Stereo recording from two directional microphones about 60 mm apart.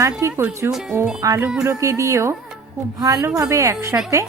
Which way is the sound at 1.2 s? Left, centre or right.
Right.